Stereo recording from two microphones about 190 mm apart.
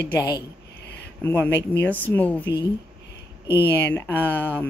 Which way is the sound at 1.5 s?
65° left (ahead or behind).